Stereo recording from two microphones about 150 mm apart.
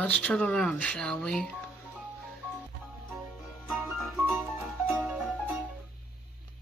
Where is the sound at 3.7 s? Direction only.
10° right (ahead or behind).